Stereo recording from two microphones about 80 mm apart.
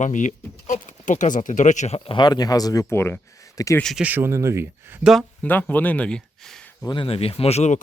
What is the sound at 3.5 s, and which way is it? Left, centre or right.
Speech, left.